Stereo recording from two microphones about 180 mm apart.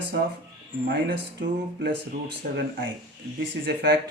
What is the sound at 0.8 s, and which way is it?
Speech, 70° right (ahead or behind).